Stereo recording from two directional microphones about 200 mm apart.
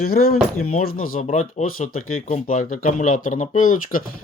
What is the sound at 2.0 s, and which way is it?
Speech, 90° left.